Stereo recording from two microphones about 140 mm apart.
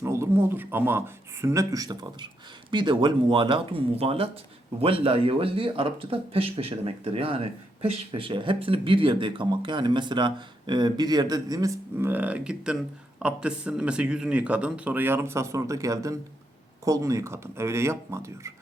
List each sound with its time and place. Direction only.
0.0 s speech: 20° right (ahead or behind)